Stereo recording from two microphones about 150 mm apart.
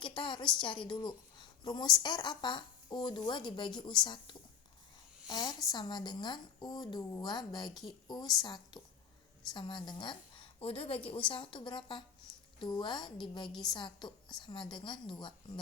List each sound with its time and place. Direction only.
0.0 s a woman's voice: 30° left (ahead or behind)
7.7 s a woman's voice: centre (ahead or behind)
8.0 s a woman's voice: 30° left (ahead or behind)
13.5 s a woman's voice: centre (ahead or behind)
13.7 s a woman's voice: 30° left (ahead or behind)